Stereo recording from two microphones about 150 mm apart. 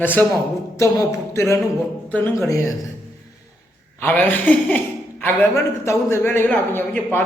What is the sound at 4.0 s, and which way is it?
Speech, 10° left (ahead or behind).